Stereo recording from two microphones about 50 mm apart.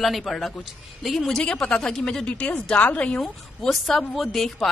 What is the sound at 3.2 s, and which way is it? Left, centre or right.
A woman's voice, centre.